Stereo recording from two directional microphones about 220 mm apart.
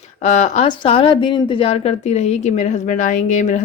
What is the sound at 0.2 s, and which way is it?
A woman's voice, 30° left (ahead or behind).